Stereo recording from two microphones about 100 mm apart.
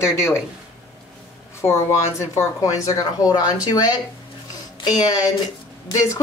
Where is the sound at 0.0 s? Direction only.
25° left (ahead or behind).